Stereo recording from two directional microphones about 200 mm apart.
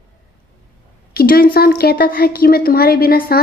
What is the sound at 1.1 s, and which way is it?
A woman's voice, 45° left (ahead or behind).